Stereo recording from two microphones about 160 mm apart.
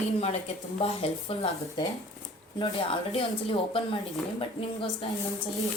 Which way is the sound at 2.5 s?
35° left (ahead or behind).